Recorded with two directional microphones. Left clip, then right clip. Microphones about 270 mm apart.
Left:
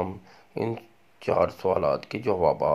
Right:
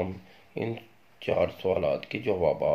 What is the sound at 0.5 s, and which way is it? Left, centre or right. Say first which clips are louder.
Speech: left 3 dB; left.